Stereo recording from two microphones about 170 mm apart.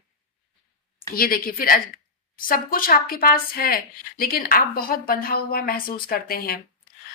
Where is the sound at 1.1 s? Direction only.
60° left (ahead or behind).